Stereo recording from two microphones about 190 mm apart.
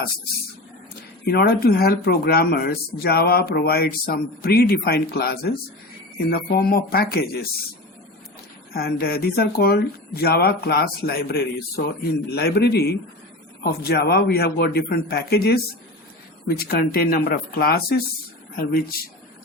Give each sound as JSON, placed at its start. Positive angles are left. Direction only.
{"t": 1.2, "sound": "speech", "side_deg": 55}
{"t": 8.7, "sound": "speech", "side_deg": 55}
{"t": 16.6, "sound": "speech", "side_deg": 50}